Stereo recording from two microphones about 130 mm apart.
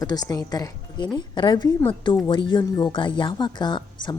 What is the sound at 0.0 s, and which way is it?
Speech, 30° left (ahead or behind).